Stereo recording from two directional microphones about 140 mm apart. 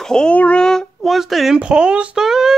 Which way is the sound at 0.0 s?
5° left (ahead or behind).